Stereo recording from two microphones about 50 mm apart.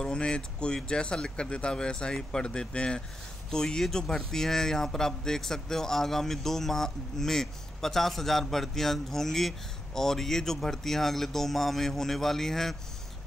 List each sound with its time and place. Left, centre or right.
0.0 s speech: centre